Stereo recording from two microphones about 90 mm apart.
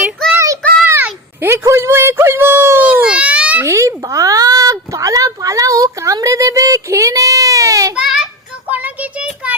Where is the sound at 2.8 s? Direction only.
15° right (ahead or behind).